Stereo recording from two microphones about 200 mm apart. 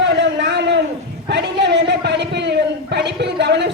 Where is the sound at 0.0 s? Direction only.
60° right (ahead or behind).